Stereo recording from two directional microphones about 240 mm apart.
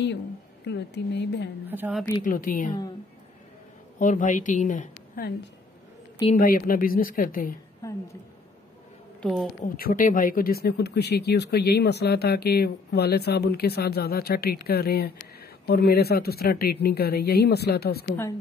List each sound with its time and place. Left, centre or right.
0.7 s speech: left
1.7 s a woman's voice: centre
2.2 s speech: left
4.0 s speech: left
6.3 s speech: left
9.2 s speech: centre
9.6 s speech: left